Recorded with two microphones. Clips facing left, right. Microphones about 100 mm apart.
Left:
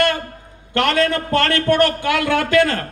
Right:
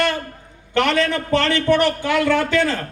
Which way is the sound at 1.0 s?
50° left (ahead or behind).